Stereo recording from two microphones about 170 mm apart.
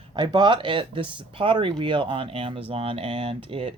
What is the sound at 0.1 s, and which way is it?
Speech, 25° right (ahead or behind).